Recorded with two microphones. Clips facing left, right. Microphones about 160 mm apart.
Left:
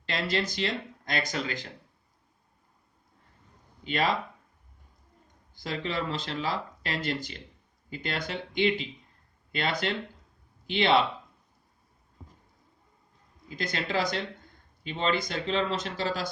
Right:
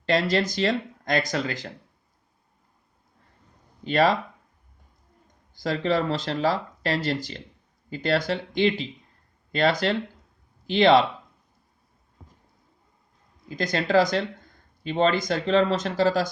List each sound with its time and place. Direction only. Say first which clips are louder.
0.1 s speech: right 7 dB; 40° right (ahead or behind)
3.8 s speech: right 8 dB; 40° right (ahead or behind)
5.5 s speech: right 8 dB; 40° right (ahead or behind)
13.6 s speech: right 9 dB; 40° right (ahead or behind)